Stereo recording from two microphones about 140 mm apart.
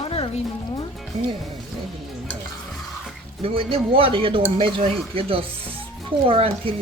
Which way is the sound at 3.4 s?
45° right (ahead or behind).